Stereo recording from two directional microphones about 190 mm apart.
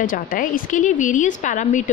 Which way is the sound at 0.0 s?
45° left (ahead or behind).